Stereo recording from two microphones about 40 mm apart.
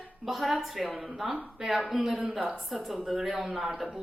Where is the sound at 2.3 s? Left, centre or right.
Right.